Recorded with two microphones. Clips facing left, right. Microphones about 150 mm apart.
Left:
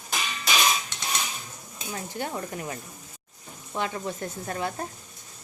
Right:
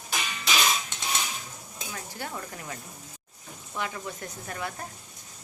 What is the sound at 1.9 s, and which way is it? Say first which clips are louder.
Stir: left 5 dB; 25° left (ahead or behind).